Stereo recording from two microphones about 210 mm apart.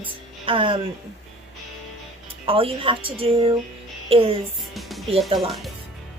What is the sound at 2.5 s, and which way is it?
Speech, 25° right (ahead or behind).